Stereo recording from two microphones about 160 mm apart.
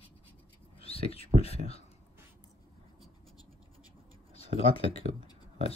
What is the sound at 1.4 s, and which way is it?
Speech, 40° left (ahead or behind).